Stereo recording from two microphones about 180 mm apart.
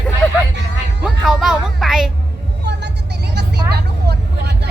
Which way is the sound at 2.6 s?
70° right (ahead or behind).